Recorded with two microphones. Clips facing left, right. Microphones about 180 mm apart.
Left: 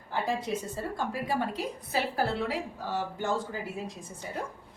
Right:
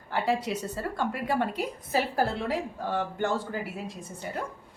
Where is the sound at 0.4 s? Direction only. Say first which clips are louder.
Right 1 dB; 70° right (ahead or behind).